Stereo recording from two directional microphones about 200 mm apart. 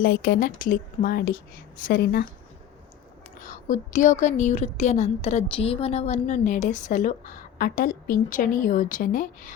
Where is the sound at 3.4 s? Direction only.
40° left (ahead or behind).